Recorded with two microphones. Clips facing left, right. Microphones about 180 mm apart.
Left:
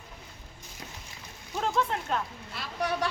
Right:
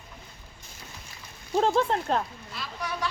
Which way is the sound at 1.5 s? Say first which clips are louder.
Right 6 dB; 30° right (ahead or behind).